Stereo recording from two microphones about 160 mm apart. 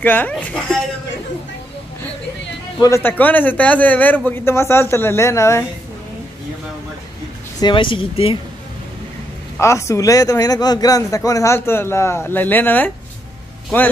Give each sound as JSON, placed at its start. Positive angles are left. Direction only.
{"t": 0.0, "sound": "a man's voice", "side_deg": 10}
{"t": 2.8, "sound": "a man's voice", "side_deg": 15}
{"t": 7.6, "sound": "speech", "side_deg": 30}
{"t": 9.6, "sound": "speech", "side_deg": 20}